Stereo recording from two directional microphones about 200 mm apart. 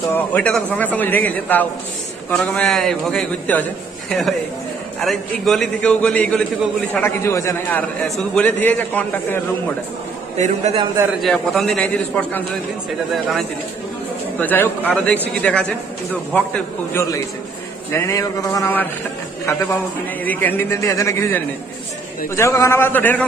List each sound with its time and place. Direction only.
0.1 s a man's voice: 10° left (ahead or behind)
5.0 s a man's voice: centre (ahead or behind)
10.3 s a man's voice: 35° right (ahead or behind)
11.2 s a man's voice: 5° left (ahead or behind)
20.2 s a man's voice: 10° left (ahead or behind)